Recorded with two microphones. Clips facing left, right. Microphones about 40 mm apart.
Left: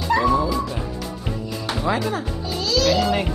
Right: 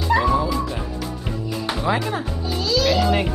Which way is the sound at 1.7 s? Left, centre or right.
Centre.